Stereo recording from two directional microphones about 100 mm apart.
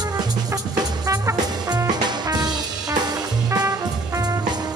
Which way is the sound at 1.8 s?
45° right (ahead or behind).